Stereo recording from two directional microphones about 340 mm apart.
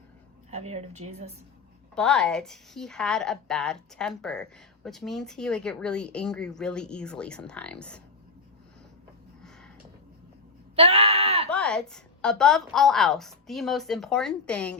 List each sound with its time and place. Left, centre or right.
0.5 s a woman's voice: centre
2.0 s a woman's voice: centre
10.8 s wail: centre
11.5 s a woman's voice: centre